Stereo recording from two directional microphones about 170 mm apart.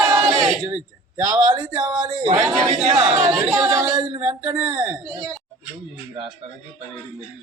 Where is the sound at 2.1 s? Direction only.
40° right (ahead or behind).